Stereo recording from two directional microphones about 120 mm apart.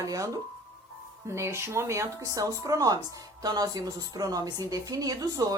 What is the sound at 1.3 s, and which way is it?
Speech, 25° right (ahead or behind).